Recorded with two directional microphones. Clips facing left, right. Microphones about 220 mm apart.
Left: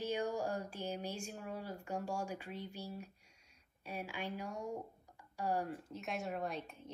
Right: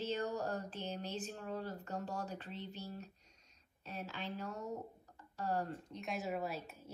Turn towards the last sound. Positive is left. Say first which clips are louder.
# left 1 dB
turn(degrees=-5)  # may be behind; listen again after turning